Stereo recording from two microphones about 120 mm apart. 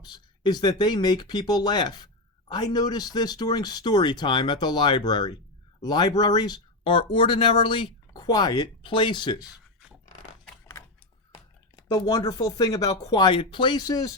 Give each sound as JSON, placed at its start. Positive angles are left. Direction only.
{"t": 0.0, "sound": "speech", "side_deg": 35}
{"t": 11.8, "sound": "speech", "side_deg": 35}